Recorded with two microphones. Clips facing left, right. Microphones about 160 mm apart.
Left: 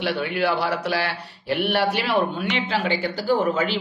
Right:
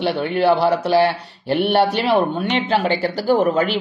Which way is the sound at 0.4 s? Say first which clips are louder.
Right 9 dB; 30° right (ahead or behind).